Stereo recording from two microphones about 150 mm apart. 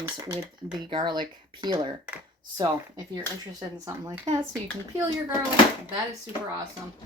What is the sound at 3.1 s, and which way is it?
Speech, 25° right (ahead or behind).